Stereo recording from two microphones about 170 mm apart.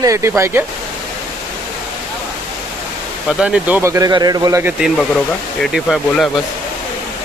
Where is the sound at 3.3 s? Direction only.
5° right (ahead or behind).